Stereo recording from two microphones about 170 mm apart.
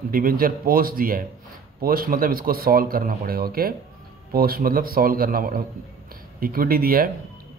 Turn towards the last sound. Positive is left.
turn(degrees=-60)  # may be behind; listen again after turning